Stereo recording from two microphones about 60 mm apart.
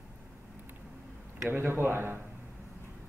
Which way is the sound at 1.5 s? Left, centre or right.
Right.